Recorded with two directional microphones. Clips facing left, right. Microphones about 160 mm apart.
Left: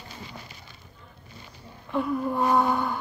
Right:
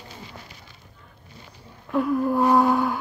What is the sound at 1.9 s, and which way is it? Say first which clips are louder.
Speech: right 5 dB; centre (ahead or behind).